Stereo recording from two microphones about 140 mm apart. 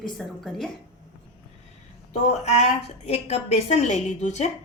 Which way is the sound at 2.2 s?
55° left (ahead or behind).